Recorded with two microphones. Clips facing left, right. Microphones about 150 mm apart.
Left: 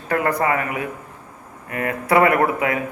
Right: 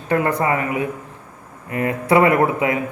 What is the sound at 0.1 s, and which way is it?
A man's voice, 25° right (ahead or behind).